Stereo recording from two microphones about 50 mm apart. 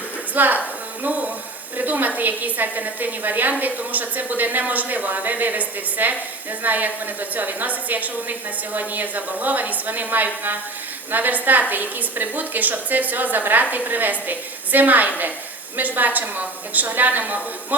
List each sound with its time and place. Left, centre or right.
0.3 s a woman's voice: right
1.0 s a sound: right
1.7 s a woman's voice: right